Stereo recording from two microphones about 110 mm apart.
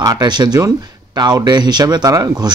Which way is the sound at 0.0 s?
35° right (ahead or behind).